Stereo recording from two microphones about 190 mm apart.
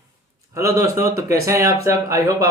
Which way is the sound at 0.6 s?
15° right (ahead or behind).